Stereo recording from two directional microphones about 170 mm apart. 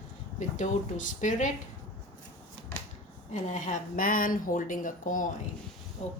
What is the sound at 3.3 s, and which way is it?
Speech, 45° left (ahead or behind).